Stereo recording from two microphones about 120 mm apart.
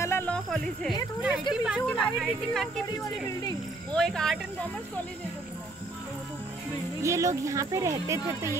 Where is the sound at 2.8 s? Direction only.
30° left (ahead or behind).